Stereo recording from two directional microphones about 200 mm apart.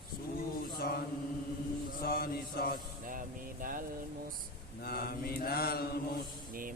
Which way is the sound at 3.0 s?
40° right (ahead or behind).